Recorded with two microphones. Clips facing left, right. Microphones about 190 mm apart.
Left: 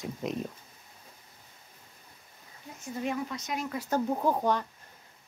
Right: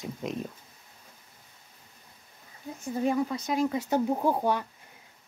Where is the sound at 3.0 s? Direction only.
35° right (ahead or behind).